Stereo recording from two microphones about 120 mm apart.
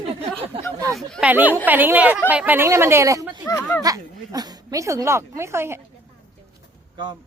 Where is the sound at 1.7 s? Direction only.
15° right (ahead or behind).